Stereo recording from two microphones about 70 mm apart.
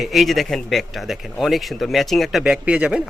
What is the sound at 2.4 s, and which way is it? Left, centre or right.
Speech, centre.